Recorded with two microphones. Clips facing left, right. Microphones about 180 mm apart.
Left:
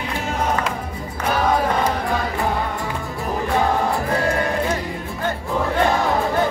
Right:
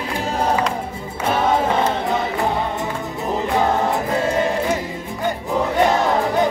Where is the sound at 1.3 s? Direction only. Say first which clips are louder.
Right 1 dB; 25° right (ahead or behind).